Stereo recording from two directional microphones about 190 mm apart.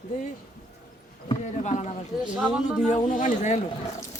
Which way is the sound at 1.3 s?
35° left (ahead or behind).